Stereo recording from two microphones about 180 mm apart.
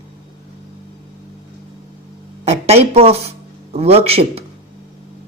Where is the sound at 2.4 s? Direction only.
35° right (ahead or behind).